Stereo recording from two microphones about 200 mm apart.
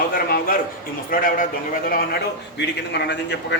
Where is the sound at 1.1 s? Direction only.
45° left (ahead or behind).